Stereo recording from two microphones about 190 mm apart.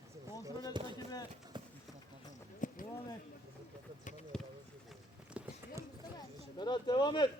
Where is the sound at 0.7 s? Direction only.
25° right (ahead or behind).